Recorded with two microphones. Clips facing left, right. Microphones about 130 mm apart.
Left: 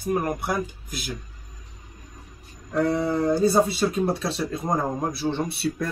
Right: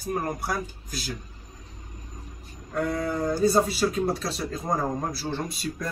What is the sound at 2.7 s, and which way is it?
Speech, 30° left (ahead or behind).